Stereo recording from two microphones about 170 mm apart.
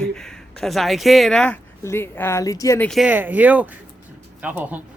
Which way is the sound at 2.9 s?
5° right (ahead or behind).